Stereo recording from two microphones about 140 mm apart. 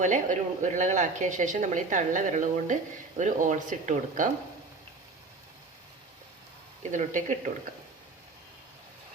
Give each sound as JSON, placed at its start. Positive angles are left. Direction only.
{"t": 0.0, "sound": "speech", "side_deg": -60}
{"t": 6.9, "sound": "speech", "side_deg": -65}